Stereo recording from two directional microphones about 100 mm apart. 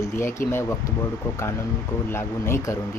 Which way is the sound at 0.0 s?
25° left (ahead or behind).